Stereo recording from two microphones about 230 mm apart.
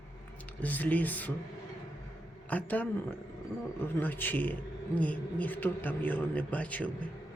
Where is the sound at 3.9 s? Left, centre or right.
Centre.